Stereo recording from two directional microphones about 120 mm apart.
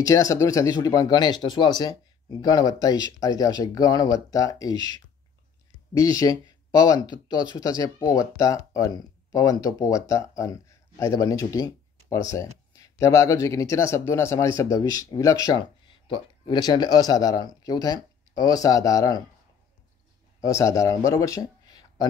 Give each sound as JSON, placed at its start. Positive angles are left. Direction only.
{"t": 0.0, "sound": "speech", "side_deg": 25}
{"t": 20.3, "sound": "a man's voice", "side_deg": 25}